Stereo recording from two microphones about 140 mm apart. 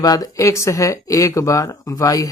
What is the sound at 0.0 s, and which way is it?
Speech, 25° left (ahead or behind).